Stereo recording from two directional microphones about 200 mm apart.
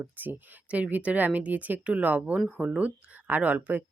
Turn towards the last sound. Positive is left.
turn(degrees=-10)  # may be behind; listen again after turning